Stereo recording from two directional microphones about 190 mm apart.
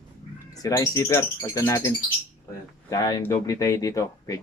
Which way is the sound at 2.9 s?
20° left (ahead or behind).